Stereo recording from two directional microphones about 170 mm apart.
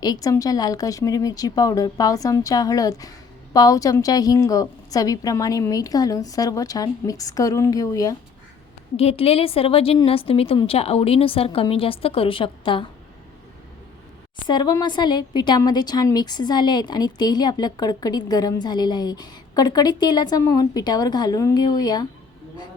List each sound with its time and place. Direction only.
0.0 s a woman's voice: 20° left (ahead or behind)
9.0 s a woman's voice: 35° left (ahead or behind)
14.4 s a woman's voice: 25° left (ahead or behind)